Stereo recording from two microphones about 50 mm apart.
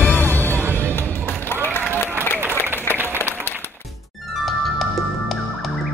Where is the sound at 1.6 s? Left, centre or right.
Left.